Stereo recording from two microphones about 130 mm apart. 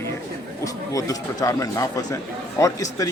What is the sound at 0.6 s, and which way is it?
Speech, 25° left (ahead or behind).